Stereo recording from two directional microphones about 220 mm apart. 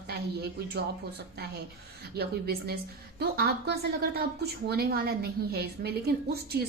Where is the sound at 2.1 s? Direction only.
45° right (ahead or behind).